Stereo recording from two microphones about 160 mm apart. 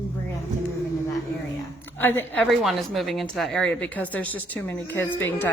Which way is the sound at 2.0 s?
10° left (ahead or behind).